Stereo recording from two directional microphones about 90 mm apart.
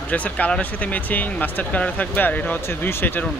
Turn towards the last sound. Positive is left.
turn(degrees=20)  # may be behind; listen again after turning